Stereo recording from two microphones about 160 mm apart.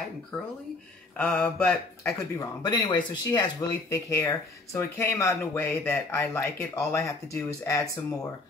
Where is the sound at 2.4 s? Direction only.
30° left (ahead or behind).